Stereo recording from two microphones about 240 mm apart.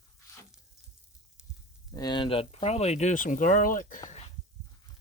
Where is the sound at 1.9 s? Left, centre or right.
Centre; by 3.9 s left.